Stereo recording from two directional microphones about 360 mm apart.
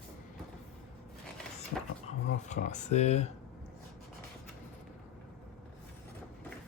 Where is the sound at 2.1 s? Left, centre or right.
Centre.